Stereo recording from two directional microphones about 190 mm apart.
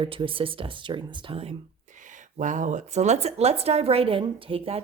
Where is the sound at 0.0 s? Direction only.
25° right (ahead or behind).